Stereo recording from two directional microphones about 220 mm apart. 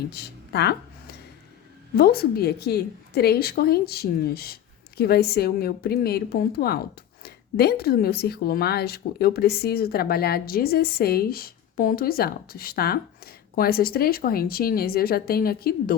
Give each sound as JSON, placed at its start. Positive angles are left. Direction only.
{"t": 0.1, "sound": "a woman's voice", "side_deg": 50}